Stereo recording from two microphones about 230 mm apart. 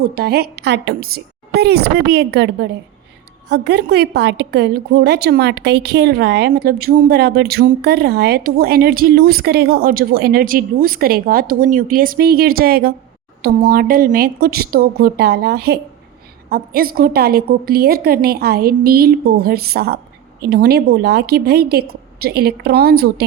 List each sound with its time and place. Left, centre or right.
0.0 s a woman's voice: right